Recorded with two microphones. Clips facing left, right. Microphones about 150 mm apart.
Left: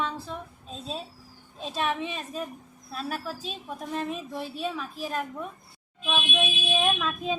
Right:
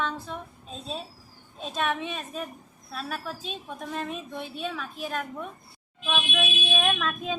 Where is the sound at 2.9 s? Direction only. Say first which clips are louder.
Left 1 dB; 40° left (ahead or behind).